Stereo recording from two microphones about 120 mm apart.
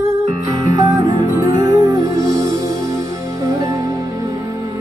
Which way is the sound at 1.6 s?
30° right (ahead or behind).